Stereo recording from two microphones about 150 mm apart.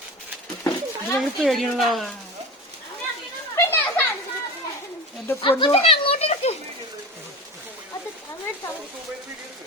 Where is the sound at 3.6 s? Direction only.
15° left (ahead or behind).